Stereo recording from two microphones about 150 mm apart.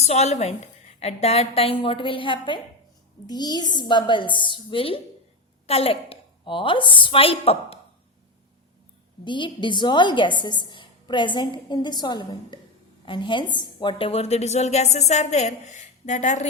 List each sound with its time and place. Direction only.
0.0 s a woman's voice: 45° left (ahead or behind)
9.2 s a woman's voice: 30° left (ahead or behind); by 16.5 s 55° left (ahead or behind)